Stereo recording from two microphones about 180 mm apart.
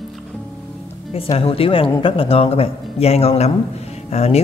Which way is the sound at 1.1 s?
30° left (ahead or behind).